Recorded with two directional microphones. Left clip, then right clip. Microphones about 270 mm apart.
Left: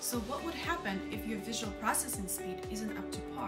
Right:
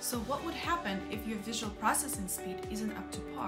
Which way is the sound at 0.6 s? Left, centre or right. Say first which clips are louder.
Right 2 dB; centre.